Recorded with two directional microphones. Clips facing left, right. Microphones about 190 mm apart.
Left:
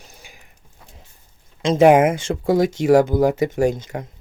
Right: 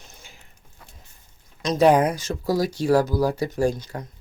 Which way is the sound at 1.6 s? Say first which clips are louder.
Left 5 dB; 25° left (ahead or behind).